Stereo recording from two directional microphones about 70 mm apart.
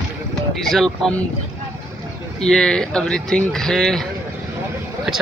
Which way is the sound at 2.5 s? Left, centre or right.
Centre.